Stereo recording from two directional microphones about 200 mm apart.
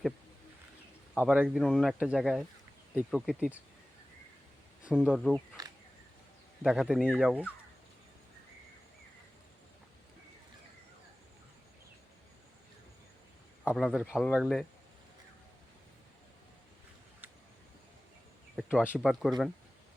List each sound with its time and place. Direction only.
1.1 s speech: 5° right (ahead or behind)
4.8 s speech: 5° right (ahead or behind)
5.6 s insect: 20° right (ahead or behind)
6.6 s speech: 5° right (ahead or behind)
13.7 s speech: 5° right (ahead or behind)
18.5 s speech: 5° right (ahead or behind)